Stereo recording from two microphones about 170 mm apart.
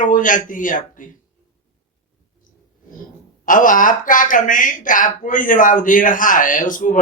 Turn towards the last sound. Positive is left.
turn(degrees=50)  # may be behind; listen again after turning